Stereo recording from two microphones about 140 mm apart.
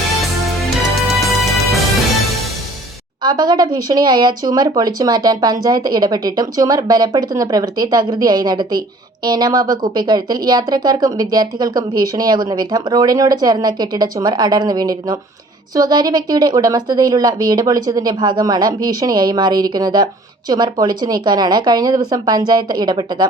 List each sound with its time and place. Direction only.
0.9 s music: centre (ahead or behind)
3.2 s speech: 30° right (ahead or behind)